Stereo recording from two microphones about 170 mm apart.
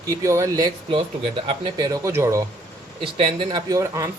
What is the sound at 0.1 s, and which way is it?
Speech, 20° right (ahead or behind).